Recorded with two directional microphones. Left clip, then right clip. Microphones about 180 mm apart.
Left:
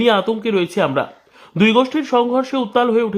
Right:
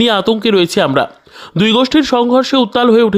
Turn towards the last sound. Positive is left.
turn(degrees=-35)  # may be behind; listen again after turning